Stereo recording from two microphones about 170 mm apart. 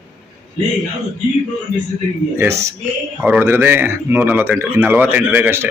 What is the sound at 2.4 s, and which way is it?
A man's voice, 15° right (ahead or behind).